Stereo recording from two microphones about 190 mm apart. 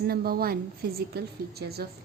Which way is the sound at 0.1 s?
55° right (ahead or behind).